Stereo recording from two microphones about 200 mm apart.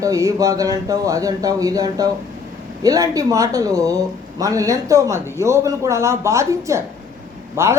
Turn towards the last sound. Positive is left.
turn(degrees=-10)  # may be behind; listen again after turning